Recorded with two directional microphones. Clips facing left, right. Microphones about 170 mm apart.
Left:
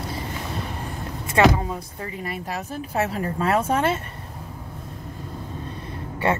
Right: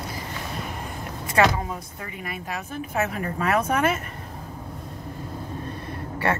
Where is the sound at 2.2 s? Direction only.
35° left (ahead or behind).